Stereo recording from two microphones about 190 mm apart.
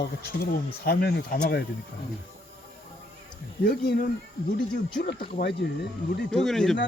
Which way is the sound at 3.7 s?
55° left (ahead or behind).